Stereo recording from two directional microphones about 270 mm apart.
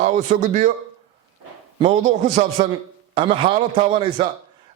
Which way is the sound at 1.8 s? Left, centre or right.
Right.